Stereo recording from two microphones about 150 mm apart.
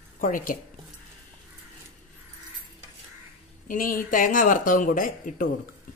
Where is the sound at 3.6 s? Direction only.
65° left (ahead or behind).